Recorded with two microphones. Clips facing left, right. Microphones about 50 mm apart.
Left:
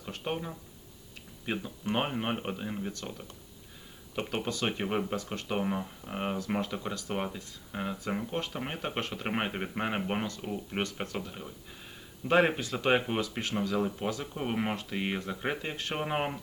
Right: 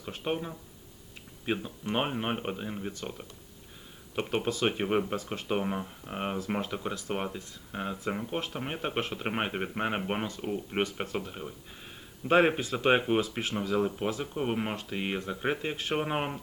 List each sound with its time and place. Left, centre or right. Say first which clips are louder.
0.0 s speech: right 2 dB; centre
1.8 s speech: left 2 dB; centre
12.3 s speech: right 2 dB; centre
14.5 s speech: even; centre